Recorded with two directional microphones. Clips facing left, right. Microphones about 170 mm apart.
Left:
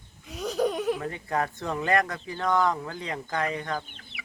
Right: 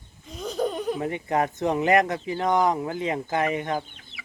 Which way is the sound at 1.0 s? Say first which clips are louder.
Right 4 dB; 20° right (ahead or behind).